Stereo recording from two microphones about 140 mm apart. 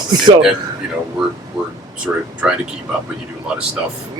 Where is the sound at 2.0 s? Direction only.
10° right (ahead or behind).